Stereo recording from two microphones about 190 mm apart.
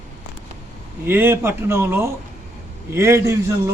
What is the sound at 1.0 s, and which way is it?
A man's voice, 10° right (ahead or behind).